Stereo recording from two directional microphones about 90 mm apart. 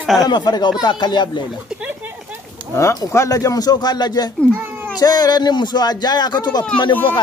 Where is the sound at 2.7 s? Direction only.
30° left (ahead or behind).